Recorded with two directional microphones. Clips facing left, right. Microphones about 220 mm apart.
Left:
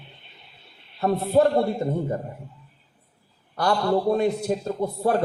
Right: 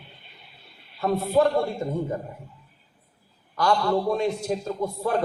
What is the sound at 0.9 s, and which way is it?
Speech, 35° left (ahead or behind).